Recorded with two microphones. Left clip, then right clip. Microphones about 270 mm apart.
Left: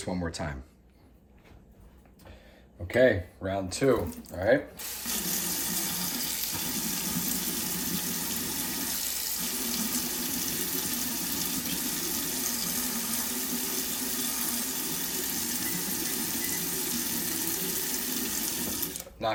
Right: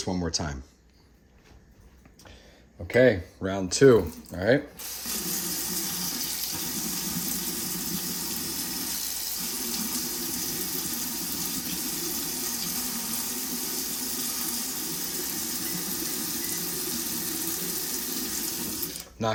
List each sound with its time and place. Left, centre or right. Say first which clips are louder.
0.0 s speech: right 4 dB; centre
2.9 s speech: right 2 dB; right
4.8 s water tap: even; centre